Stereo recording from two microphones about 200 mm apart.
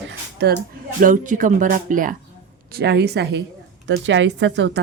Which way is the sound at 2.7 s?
55° right (ahead or behind).